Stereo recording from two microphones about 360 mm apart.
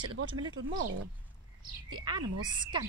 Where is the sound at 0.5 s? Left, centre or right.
Right.